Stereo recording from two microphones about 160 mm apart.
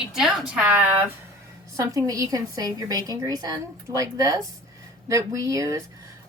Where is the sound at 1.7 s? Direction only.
20° right (ahead or behind).